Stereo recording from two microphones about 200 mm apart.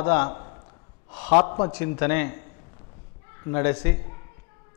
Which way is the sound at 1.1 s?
10° left (ahead or behind).